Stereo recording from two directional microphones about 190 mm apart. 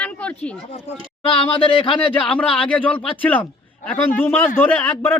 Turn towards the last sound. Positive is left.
turn(degrees=10)  # may be behind; listen again after turning